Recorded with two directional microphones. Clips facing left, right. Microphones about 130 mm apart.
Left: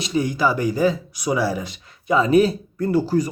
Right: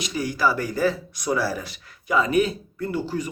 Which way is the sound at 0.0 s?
25° left (ahead or behind).